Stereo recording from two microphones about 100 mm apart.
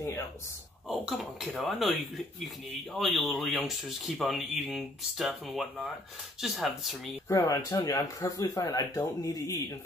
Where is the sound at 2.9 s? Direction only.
Centre (ahead or behind).